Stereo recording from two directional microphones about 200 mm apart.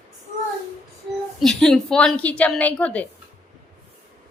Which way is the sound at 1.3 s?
5° left (ahead or behind).